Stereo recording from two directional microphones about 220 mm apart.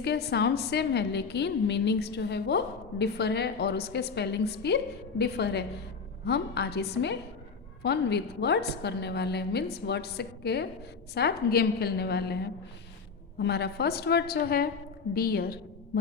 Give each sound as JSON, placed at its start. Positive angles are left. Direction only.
{"t": 0.0, "sound": "a woman's voice", "side_deg": 50}
{"t": 13.4, "sound": "a woman's voice", "side_deg": 50}